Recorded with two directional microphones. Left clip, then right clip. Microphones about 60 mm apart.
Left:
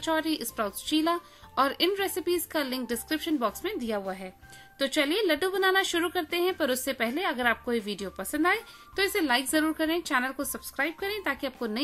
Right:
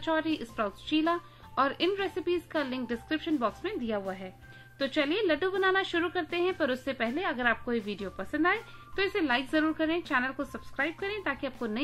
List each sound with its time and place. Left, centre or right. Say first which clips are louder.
0.0 s a woman's voice: left 2 dB; left